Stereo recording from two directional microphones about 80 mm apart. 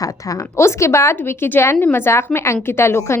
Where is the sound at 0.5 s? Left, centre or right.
Left.